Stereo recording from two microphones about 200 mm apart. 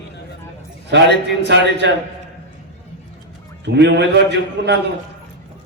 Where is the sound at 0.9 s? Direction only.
60° right (ahead or behind).